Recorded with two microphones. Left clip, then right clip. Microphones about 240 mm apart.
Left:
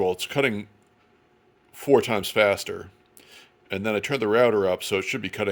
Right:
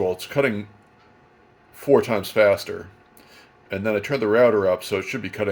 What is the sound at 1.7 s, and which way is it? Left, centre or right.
Speech, left.